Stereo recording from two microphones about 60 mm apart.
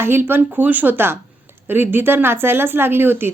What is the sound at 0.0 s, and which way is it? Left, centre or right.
A woman's voice, right.